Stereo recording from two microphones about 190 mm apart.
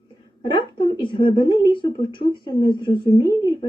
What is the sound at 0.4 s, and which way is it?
A woman's voice, 25° left (ahead or behind).